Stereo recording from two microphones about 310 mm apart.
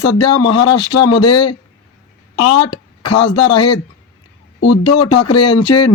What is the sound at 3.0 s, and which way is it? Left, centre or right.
Speech, left.